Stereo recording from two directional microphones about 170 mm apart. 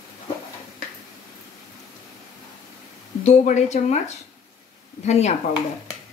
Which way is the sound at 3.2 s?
40° left (ahead or behind).